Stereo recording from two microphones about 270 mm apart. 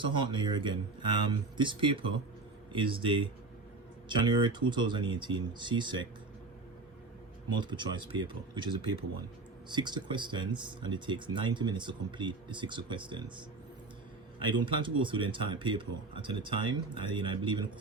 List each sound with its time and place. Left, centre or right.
0.0 s speech: centre
7.5 s speech: centre
14.5 s speech: centre